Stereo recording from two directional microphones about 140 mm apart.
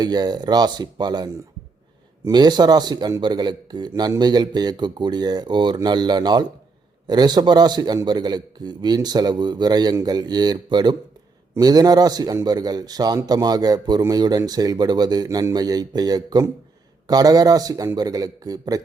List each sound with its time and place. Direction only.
0.0 s a man's voice: 30° right (ahead or behind)